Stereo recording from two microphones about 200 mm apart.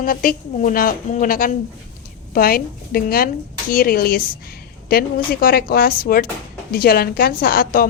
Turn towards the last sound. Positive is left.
turn(degrees=45)  # may be behind; listen again after turning